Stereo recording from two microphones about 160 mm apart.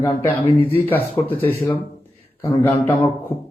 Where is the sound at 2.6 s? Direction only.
15° left (ahead or behind).